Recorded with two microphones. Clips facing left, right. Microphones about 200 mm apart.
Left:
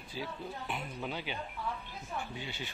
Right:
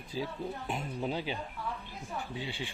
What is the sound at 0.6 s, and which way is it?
Speech, 30° right (ahead or behind).